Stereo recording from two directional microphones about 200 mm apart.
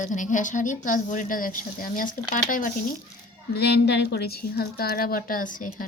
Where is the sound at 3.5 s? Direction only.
55° left (ahead or behind).